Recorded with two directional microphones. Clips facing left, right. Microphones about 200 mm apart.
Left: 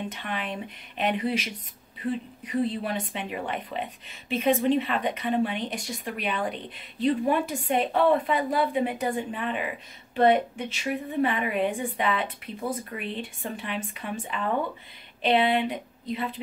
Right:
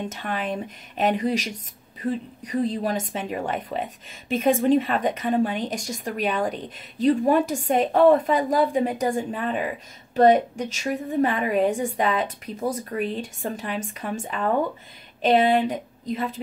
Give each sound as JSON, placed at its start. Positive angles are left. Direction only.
{"t": 0.1, "sound": "a woman's voice", "side_deg": -45}